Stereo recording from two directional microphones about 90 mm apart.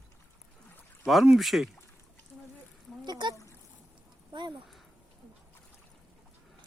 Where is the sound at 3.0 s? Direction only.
50° right (ahead or behind).